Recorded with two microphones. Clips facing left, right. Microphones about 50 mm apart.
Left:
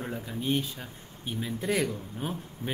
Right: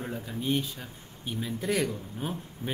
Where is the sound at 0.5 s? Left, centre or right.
Centre.